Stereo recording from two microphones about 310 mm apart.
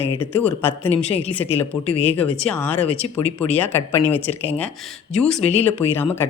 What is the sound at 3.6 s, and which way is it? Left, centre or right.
Speech, centre.